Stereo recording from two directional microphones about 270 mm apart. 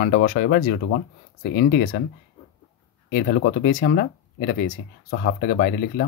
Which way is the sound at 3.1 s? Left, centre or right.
Left.